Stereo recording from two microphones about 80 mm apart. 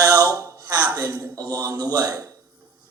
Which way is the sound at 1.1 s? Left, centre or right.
Right.